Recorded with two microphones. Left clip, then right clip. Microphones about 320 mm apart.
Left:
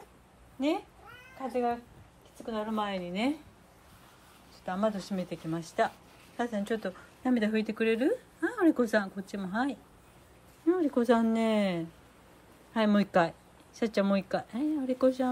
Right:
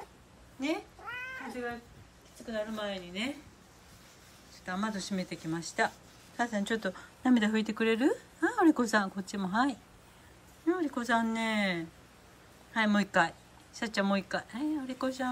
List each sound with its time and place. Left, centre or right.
2.5 s speech: centre
4.6 s a woman's voice: centre